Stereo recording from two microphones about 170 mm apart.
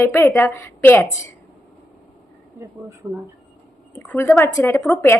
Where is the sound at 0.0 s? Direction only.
15° left (ahead or behind).